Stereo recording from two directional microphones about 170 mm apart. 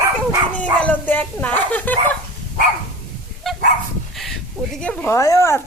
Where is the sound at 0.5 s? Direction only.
10° left (ahead or behind).